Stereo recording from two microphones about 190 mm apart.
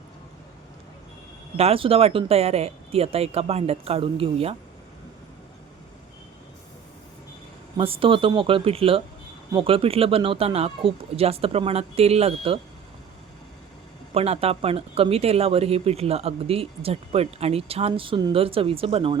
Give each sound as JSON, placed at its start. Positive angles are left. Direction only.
{"t": 1.5, "sound": "speech", "side_deg": -30}
{"t": 7.8, "sound": "speech", "side_deg": -30}
{"t": 14.1, "sound": "speech", "side_deg": -30}